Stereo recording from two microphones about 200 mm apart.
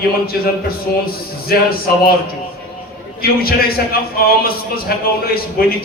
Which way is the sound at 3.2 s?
50° left (ahead or behind).